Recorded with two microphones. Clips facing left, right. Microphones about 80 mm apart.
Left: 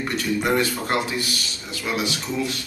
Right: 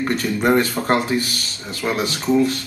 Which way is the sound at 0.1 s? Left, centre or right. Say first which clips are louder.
Right 4 dB; right.